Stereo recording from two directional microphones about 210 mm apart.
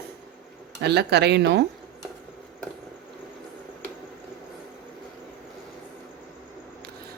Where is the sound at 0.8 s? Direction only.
50° right (ahead or behind).